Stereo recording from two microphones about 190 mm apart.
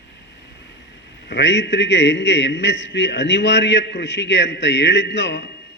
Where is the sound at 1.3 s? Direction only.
65° left (ahead or behind).